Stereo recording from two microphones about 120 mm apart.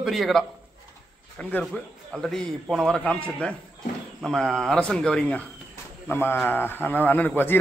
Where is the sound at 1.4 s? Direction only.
10° left (ahead or behind).